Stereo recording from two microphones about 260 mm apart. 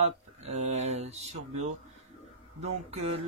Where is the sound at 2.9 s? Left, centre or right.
Right.